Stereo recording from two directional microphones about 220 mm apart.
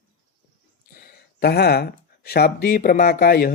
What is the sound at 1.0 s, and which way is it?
Speech, 45° left (ahead or behind).